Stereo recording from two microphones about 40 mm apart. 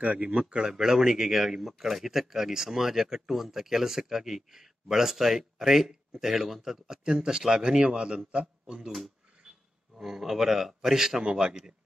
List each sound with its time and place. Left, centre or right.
0.0 s speech: right
0.6 s a man's voice: centre
9.9 s speech: centre